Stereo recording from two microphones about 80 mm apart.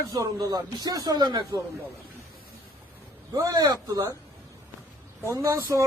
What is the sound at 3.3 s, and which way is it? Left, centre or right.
Speech, right.